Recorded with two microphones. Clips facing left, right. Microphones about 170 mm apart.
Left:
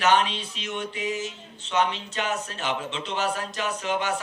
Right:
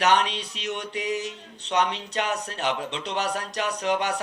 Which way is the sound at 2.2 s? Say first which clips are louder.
Right 1 dB; 35° right (ahead or behind).